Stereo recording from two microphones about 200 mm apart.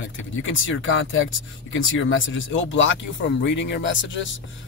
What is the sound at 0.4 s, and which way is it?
Speech, 75° left (ahead or behind).